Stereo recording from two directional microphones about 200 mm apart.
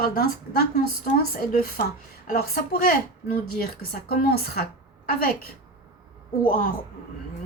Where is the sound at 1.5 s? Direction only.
45° left (ahead or behind).